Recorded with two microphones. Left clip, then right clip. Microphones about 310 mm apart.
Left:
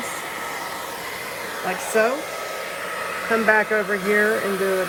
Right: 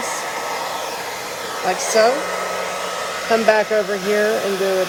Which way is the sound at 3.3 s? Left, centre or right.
Centre.